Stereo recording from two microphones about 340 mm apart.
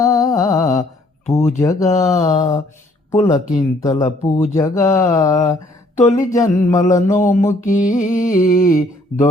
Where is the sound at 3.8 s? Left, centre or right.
Centre.